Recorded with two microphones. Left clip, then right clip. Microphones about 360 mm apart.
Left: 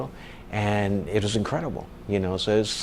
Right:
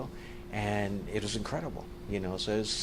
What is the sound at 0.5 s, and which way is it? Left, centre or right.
Speech, left.